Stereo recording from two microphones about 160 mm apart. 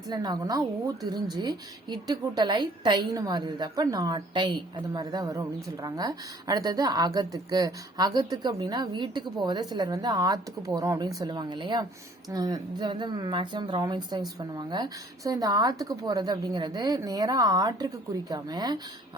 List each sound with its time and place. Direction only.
0.1 s a woman's voice: 25° right (ahead or behind)